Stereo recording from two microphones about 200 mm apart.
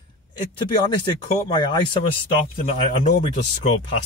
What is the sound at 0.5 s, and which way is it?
Speech, 20° left (ahead or behind).